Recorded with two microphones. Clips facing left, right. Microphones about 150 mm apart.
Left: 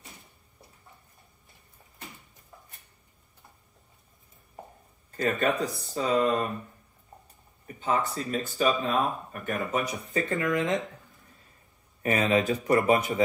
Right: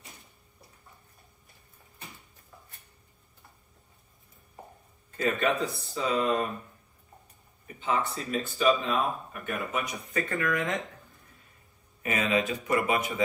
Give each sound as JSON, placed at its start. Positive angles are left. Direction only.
{"t": 5.4, "sound": "speech", "side_deg": 45}
{"t": 7.6, "sound": "a sound", "side_deg": 40}
{"t": 8.1, "sound": "speech", "side_deg": 40}
{"t": 10.3, "sound": "speech", "side_deg": 20}
{"t": 12.0, "sound": "speech", "side_deg": 35}